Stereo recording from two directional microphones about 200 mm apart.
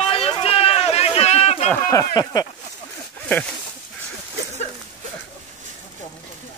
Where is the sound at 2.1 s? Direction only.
20° left (ahead or behind).